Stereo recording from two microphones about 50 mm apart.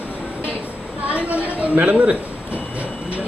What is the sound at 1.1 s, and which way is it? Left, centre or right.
A man's voice, right.